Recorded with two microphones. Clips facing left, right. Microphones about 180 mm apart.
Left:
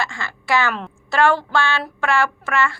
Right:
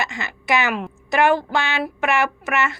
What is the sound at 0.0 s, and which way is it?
A woman's voice, 20° right (ahead or behind).